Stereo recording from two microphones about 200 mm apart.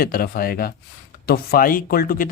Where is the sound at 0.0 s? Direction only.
45° left (ahead or behind).